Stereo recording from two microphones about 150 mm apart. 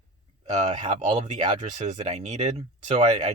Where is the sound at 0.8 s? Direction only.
35° right (ahead or behind).